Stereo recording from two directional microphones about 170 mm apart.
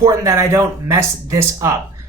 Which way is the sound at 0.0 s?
20° right (ahead or behind).